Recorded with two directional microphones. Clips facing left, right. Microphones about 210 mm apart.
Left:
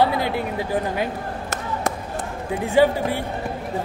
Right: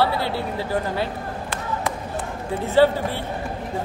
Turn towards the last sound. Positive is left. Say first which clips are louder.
# even
turn(degrees=15)  # may be behind; listen again after turning